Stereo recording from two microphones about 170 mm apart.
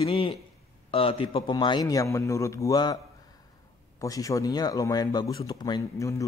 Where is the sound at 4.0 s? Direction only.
20° left (ahead or behind).